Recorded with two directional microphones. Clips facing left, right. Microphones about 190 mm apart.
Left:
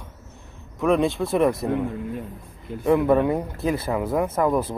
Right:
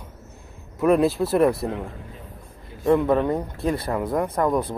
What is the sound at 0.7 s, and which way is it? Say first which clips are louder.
Speech: right 2 dB; 5° right (ahead or behind).